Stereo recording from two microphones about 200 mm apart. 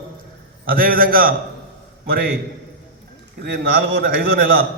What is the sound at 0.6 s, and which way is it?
A man's voice, 45° right (ahead or behind).